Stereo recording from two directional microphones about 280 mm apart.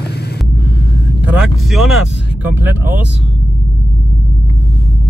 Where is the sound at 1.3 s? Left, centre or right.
Centre.